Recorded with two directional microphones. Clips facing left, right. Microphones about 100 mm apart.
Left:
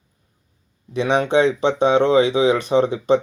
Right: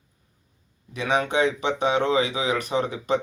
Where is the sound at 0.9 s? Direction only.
25° left (ahead or behind).